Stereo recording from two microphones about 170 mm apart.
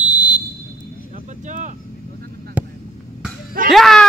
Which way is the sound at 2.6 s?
10° right (ahead or behind).